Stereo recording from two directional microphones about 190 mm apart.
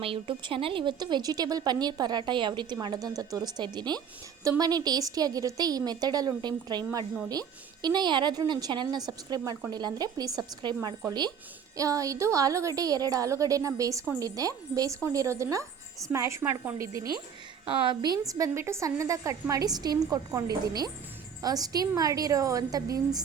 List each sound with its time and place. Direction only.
0.0 s a woman's voice: 30° right (ahead or behind)
17.7 s a woman's voice: 25° right (ahead or behind)